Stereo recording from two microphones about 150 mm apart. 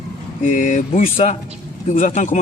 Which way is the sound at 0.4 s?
60° left (ahead or behind).